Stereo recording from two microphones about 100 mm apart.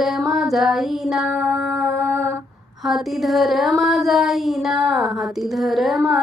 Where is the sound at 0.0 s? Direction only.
Centre (ahead or behind).